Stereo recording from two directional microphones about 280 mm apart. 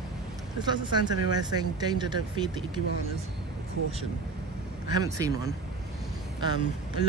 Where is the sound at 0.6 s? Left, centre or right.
Centre.